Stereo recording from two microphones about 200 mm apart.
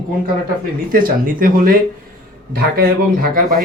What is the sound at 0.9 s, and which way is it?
Speech, 45° right (ahead or behind).